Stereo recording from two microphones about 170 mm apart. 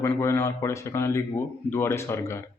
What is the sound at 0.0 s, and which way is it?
A man's voice, 15° left (ahead or behind).